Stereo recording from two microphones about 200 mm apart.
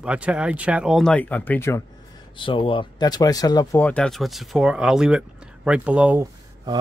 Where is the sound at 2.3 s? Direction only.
25° left (ahead or behind); by 6.3 s 10° right (ahead or behind).